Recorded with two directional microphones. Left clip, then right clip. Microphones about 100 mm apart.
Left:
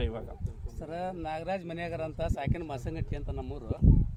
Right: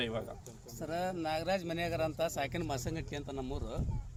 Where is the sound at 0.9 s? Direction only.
20° left (ahead or behind).